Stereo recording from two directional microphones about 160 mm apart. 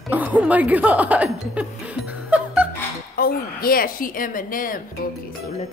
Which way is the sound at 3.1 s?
65° left (ahead or behind).